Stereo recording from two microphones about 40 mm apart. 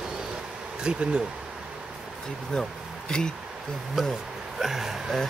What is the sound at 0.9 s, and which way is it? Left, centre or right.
Speech, right.